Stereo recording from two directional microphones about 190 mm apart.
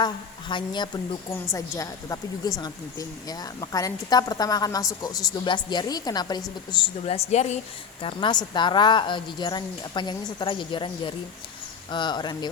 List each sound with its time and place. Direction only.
0.0 s a woman's voice: 25° left (ahead or behind)
8.0 s a woman's voice: 25° left (ahead or behind)